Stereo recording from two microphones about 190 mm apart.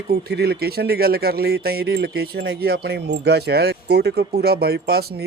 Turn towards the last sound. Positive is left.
turn(degrees=-55)  # may be behind; listen again after turning